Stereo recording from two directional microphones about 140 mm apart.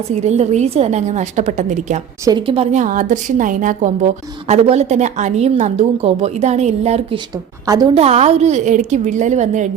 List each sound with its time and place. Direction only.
0.2 s a woman's voice: 50° right (ahead or behind)
2.5 s a woman's voice: 45° right (ahead or behind)
2.8 s a woman's voice: 70° right (ahead or behind); by 7.2 s 50° right (ahead or behind)
7.7 s a woman's voice: 30° right (ahead or behind)
7.9 s a woman's voice: 50° right (ahead or behind)